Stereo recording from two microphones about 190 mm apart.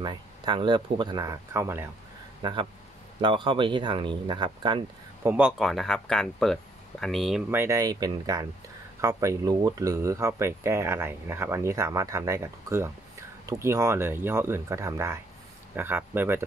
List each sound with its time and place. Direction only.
0.0 s speech: 25° right (ahead or behind)
2.4 s speech: 25° right (ahead or behind)
5.2 s speech: 5° right (ahead or behind)
7.5 s speech: 15° right (ahead or behind)